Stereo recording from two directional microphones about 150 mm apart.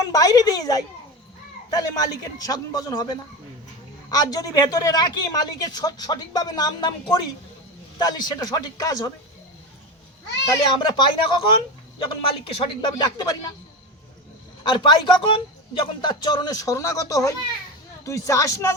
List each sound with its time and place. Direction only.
0.0 s a woman's voice: 25° left (ahead or behind)
10.7 s speech: 30° left (ahead or behind)
14.6 s a woman's voice: 35° left (ahead or behind)